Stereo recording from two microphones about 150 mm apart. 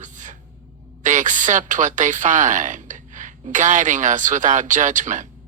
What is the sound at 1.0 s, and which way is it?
Speech, 55° right (ahead or behind).